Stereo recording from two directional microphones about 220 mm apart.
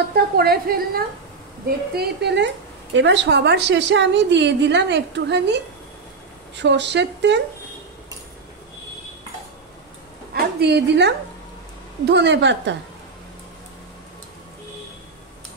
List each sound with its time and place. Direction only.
0.1 s a woman's voice: 45° right (ahead or behind)
10.3 s a woman's voice: 50° right (ahead or behind)